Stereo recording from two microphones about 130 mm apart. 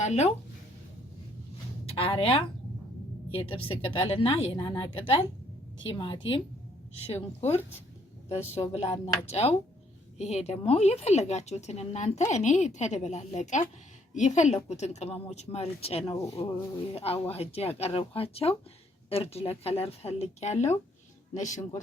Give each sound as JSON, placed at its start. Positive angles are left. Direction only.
{"t": 0.0, "sound": "speech", "side_deg": 60}
{"t": 1.9, "sound": "a woman's voice", "side_deg": 50}
{"t": 7.1, "sound": "a woman's voice", "side_deg": 50}